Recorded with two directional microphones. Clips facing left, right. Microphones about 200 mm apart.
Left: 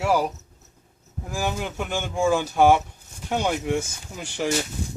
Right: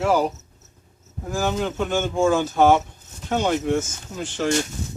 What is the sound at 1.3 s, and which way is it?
Speech, 10° left (ahead or behind).